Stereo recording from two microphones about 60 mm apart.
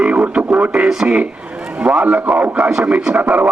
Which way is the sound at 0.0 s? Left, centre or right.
Centre.